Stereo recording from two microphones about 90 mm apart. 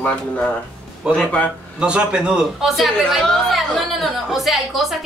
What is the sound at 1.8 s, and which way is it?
A woman's voice, 10° right (ahead or behind).